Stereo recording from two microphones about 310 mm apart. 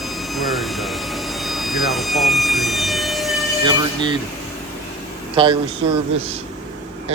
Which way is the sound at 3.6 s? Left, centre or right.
Centre.